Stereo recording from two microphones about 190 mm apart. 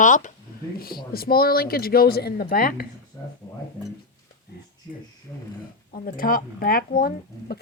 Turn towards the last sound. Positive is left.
turn(degrees=50)  # may be behind; listen again after turning